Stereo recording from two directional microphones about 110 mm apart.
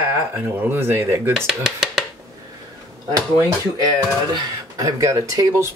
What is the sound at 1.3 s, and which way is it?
Speech, 5° right (ahead or behind).